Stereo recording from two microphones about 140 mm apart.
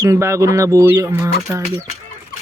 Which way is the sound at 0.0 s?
20° right (ahead or behind).